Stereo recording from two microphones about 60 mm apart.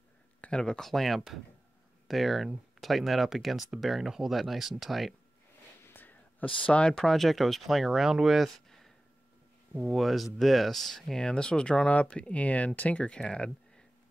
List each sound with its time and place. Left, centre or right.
0.4 s speech: centre
6.6 s speech: centre
11.1 s speech: centre